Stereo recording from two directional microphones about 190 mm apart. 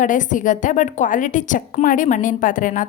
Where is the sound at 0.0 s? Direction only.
45° left (ahead or behind).